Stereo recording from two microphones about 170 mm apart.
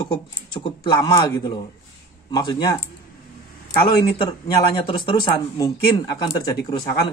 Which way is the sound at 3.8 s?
30° left (ahead or behind).